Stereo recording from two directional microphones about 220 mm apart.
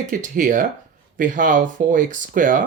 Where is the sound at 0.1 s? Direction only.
35° right (ahead or behind).